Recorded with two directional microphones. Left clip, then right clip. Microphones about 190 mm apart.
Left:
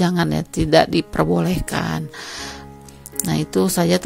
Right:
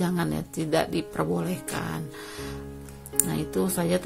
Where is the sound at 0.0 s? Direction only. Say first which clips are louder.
Left 8 dB; 40° left (ahead or behind).